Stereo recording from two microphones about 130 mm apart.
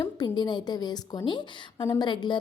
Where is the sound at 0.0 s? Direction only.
35° left (ahead or behind).